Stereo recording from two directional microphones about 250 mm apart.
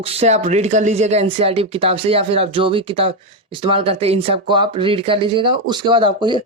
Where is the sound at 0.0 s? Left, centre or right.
Right.